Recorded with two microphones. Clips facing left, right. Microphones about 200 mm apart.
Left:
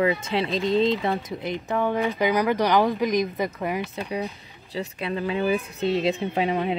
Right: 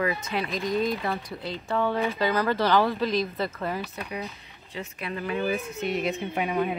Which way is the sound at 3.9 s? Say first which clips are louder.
Left 5 dB; 30° left (ahead or behind).